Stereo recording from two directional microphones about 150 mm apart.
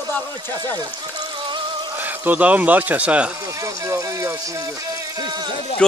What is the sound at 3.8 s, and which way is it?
Speech, 20° right (ahead or behind).